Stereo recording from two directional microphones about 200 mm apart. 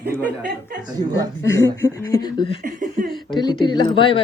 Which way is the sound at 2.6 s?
40° right (ahead or behind).